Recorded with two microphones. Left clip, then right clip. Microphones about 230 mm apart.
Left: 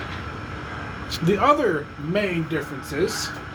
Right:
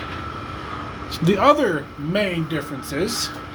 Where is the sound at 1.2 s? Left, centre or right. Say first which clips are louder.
Right 3 dB; right.